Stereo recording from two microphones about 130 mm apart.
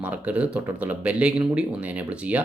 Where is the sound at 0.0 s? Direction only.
10° right (ahead or behind).